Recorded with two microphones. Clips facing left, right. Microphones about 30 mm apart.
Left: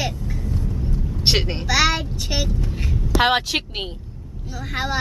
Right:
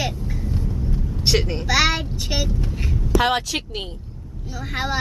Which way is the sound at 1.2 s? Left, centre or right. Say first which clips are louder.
Even; left.